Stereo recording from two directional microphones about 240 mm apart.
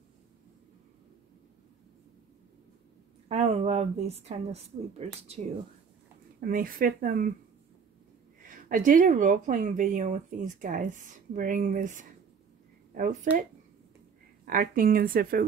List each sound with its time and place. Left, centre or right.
3.3 s speech: right
6.4 s speech: right
8.5 s speech: right
14.4 s speech: right